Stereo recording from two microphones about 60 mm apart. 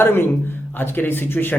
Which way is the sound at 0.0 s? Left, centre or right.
Left.